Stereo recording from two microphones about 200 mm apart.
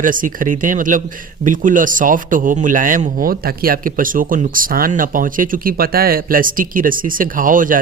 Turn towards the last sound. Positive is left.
turn(degrees=-40)  # may be behind; listen again after turning